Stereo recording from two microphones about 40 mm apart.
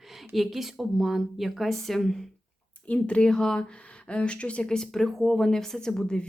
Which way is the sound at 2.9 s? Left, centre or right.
Left.